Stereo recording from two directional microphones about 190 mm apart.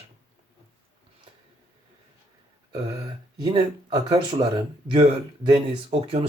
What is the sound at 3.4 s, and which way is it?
Speech, 30° right (ahead or behind).